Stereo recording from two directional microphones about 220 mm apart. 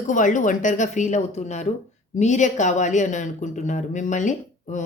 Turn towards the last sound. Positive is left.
turn(degrees=35)  # may be behind; listen again after turning